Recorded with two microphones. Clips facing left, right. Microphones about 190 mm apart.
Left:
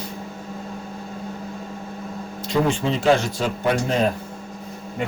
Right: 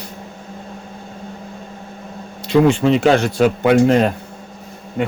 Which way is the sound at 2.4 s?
70° right (ahead or behind).